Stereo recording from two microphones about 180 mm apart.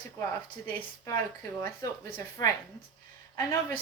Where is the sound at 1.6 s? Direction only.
20° left (ahead or behind).